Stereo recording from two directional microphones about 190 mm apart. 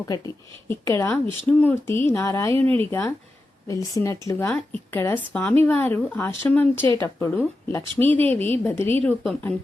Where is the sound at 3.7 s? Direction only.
15° left (ahead or behind).